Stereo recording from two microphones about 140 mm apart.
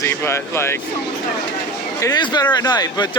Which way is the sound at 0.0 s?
20° left (ahead or behind).